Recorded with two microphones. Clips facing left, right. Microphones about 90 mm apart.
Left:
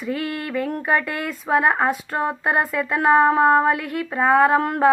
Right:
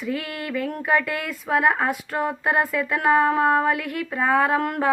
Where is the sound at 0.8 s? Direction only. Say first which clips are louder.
Right 1 dB; centre (ahead or behind).